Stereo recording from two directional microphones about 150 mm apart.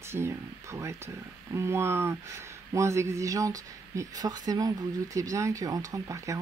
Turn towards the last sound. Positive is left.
turn(degrees=-20)  # may be behind; listen again after turning